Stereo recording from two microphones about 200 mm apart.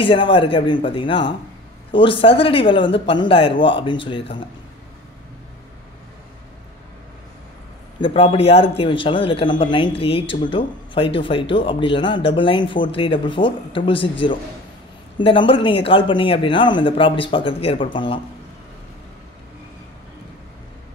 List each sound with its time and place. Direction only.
0.0 s speech: 25° left (ahead or behind)
8.0 s speech: 25° left (ahead or behind)